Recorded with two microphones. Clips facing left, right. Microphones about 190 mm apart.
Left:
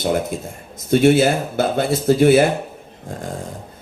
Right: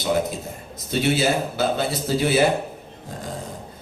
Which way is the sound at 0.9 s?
50° left (ahead or behind).